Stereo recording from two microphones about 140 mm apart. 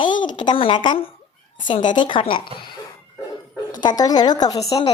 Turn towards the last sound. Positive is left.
turn(degrees=25)  # may be behind; listen again after turning